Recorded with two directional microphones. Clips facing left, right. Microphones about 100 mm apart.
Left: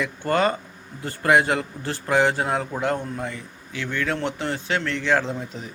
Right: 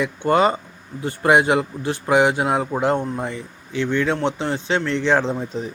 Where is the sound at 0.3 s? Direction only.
20° right (ahead or behind).